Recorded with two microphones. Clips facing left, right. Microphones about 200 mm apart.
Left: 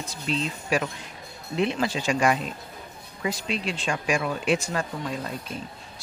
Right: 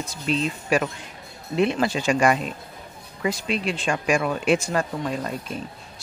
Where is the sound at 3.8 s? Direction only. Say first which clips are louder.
Right 4 dB; 55° right (ahead or behind).